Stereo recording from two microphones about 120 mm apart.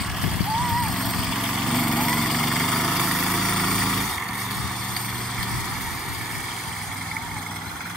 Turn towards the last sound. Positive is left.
turn(degrees=0)  # may be behind; listen again after turning